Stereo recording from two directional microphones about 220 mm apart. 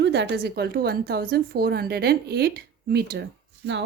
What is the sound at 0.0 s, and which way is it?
A woman's voice, 50° right (ahead or behind).